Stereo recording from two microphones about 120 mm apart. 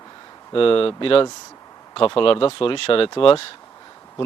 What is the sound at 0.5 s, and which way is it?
Speech, 50° left (ahead or behind).